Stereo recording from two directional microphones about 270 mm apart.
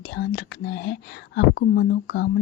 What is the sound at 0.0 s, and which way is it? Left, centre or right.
Speech, left.